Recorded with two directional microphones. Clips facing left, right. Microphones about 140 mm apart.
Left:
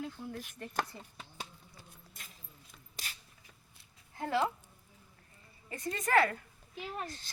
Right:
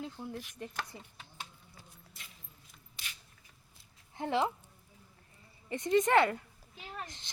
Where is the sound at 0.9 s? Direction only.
15° right (ahead or behind).